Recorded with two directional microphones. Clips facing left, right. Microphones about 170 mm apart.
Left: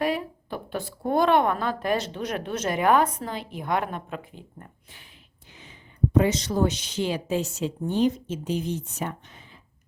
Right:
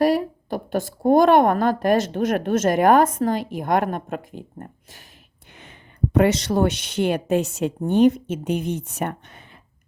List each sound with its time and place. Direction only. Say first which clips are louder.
0.0 s a woman's voice: right 8 dB; 40° right (ahead or behind)
6.1 s speech: right 4 dB; 75° right (ahead or behind)